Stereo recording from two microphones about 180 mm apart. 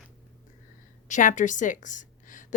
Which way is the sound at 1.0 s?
45° left (ahead or behind).